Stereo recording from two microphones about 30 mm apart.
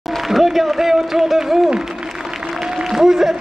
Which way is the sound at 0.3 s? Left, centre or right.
Centre.